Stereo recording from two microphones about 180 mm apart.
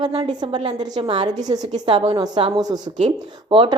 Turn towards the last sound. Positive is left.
turn(degrees=-30)  # may be behind; listen again after turning